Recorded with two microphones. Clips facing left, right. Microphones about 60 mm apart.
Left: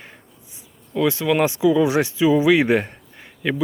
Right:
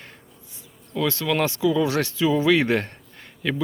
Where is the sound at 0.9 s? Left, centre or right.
Centre.